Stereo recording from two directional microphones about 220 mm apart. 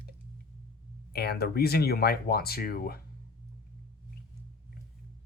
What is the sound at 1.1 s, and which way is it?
Speech, 45° left (ahead or behind).